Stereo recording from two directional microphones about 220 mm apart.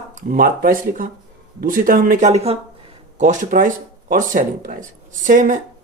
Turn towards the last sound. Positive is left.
turn(degrees=-35)  # may be behind; listen again after turning